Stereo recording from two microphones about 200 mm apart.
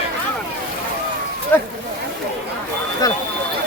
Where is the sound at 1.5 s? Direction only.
10° left (ahead or behind).